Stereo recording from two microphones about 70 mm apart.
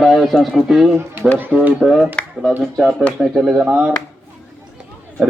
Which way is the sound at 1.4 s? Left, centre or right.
Right.